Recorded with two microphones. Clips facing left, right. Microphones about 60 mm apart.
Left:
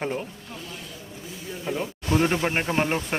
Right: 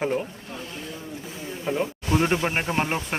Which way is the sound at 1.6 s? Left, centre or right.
Centre.